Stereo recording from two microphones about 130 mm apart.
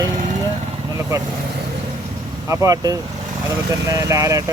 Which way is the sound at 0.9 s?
25° right (ahead or behind).